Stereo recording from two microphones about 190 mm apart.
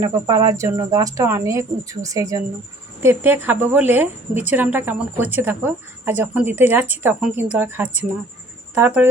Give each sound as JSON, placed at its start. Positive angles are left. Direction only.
{"t": 0.0, "sound": "speech", "side_deg": -15}